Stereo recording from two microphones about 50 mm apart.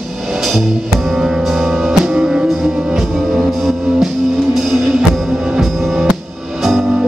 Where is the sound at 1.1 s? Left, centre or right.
Centre.